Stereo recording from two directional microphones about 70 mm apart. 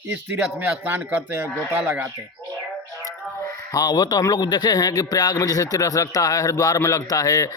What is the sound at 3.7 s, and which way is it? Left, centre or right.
A man's voice, left.